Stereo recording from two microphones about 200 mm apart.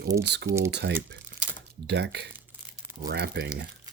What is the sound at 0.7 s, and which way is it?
Speech, 60° right (ahead or behind).